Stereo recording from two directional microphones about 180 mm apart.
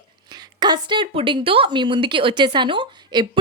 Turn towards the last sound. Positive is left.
turn(degrees=-25)  # may be behind; listen again after turning